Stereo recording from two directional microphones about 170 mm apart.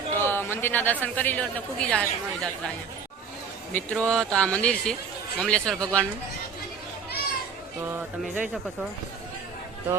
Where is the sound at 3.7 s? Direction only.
5° left (ahead or behind).